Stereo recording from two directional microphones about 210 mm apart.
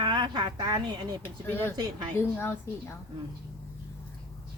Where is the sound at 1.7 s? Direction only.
15° right (ahead or behind).